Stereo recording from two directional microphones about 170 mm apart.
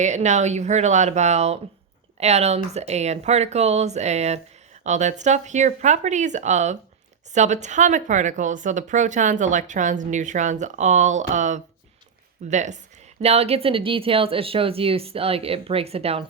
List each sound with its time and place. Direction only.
0.0 s speech: 45° right (ahead or behind)